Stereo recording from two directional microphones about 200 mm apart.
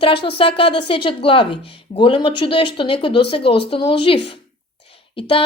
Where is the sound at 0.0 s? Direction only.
25° left (ahead or behind).